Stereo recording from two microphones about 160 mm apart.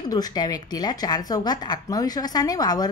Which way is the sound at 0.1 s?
25° left (ahead or behind).